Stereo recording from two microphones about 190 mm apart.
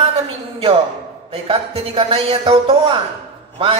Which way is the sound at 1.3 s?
30° right (ahead or behind).